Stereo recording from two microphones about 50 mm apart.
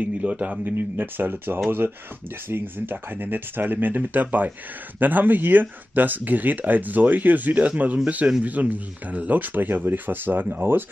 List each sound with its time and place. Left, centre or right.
0.0 s a man's voice: right
0.7 s speech: right